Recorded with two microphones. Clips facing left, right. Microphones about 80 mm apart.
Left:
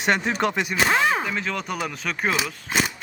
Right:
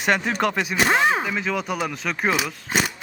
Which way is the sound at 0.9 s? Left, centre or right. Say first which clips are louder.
Right 2 dB; centre.